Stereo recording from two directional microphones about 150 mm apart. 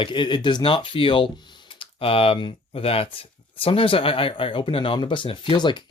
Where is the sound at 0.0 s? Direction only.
35° left (ahead or behind).